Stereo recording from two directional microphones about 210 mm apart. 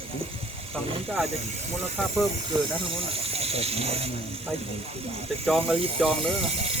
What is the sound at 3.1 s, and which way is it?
Speech, 30° right (ahead or behind).